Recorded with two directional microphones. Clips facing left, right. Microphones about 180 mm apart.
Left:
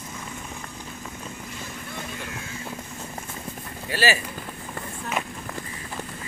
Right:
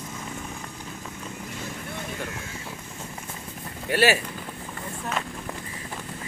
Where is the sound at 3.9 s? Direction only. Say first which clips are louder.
Right 3 dB; 60° right (ahead or behind).